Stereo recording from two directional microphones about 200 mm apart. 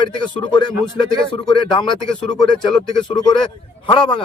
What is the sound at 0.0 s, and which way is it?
Speech, 25° left (ahead or behind).